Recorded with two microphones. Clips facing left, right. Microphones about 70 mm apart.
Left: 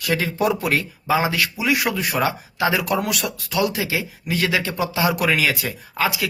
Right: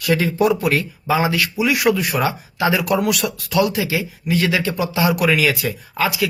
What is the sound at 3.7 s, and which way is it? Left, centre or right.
Speech, left.